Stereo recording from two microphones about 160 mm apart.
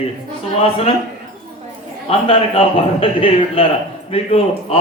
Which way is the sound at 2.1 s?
40° left (ahead or behind).